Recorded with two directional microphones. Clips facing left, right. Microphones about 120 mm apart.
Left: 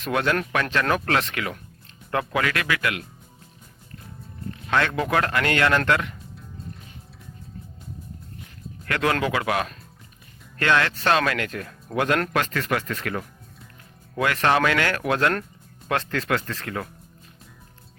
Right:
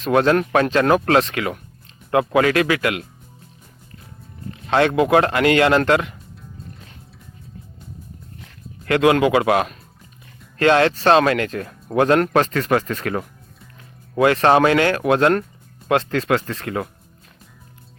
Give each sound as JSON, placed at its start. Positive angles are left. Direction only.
{"t": 0.0, "sound": "speech", "side_deg": -30}
{"t": 4.7, "sound": "speech", "side_deg": -25}
{"t": 8.9, "sound": "speech", "side_deg": -20}